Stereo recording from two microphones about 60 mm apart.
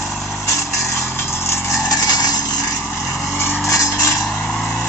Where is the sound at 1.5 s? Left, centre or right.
Left.